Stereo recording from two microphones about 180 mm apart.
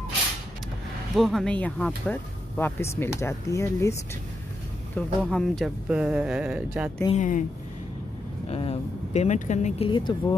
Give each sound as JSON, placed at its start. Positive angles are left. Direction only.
{"t": 1.1, "sound": "speech", "side_deg": 0}
{"t": 4.9, "sound": "speech", "side_deg": 5}
{"t": 7.2, "sound": "speech", "side_deg": 45}
{"t": 8.5, "sound": "a sound", "side_deg": 35}
{"t": 9.8, "sound": "speech", "side_deg": 25}